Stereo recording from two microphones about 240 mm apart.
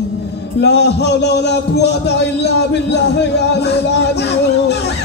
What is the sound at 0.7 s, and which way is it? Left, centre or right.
A man's voice, left.